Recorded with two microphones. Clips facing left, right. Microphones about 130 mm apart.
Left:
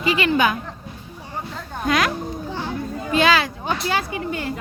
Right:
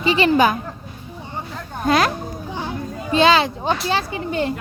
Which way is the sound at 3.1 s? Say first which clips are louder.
Right 3 dB; 25° right (ahead or behind).